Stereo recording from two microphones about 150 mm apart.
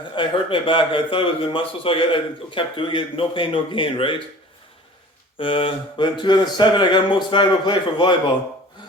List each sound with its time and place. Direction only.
0.2 s a man's voice: 35° left (ahead or behind)
5.4 s a man's voice: 35° left (ahead or behind)